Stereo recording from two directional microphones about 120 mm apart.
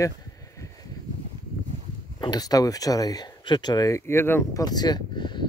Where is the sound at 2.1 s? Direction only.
35° left (ahead or behind).